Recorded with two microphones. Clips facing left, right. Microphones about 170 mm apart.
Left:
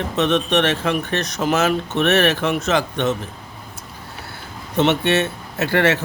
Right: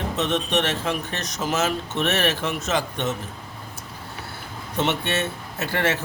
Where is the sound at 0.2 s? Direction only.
65° left (ahead or behind).